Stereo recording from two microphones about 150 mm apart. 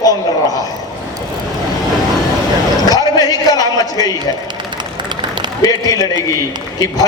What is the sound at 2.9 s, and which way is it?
A man's voice, 25° left (ahead or behind).